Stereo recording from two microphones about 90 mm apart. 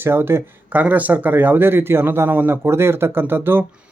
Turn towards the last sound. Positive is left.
turn(degrees=-25)  # may be behind; listen again after turning